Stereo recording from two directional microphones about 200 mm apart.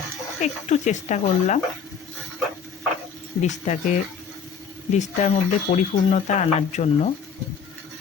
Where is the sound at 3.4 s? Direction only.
35° left (ahead or behind).